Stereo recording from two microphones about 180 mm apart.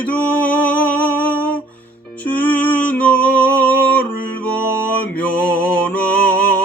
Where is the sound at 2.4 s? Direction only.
10° left (ahead or behind).